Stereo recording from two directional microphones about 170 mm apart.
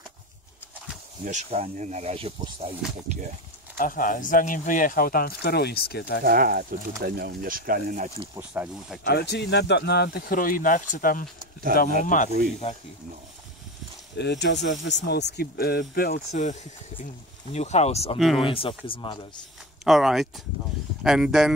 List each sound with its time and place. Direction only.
1.2 s speech: 40° right (ahead or behind)
3.7 s speech: 55° left (ahead or behind); by 6.2 s 70° left (ahead or behind)
6.2 s speech: 60° right (ahead or behind)
8.4 s speech: 5° right (ahead or behind)
9.0 s speech: 75° left (ahead or behind); by 12.3 s 50° left (ahead or behind)
14.1 s speech: 85° left; by 16.5 s 55° left (ahead or behind)
17.0 s speech: 40° left (ahead or behind); by 19.4 s 25° left (ahead or behind)
19.8 s speech: centre (ahead or behind)